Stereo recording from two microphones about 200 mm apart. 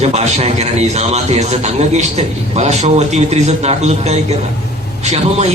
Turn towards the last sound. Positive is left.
turn(degrees=-35)  # may be behind; listen again after turning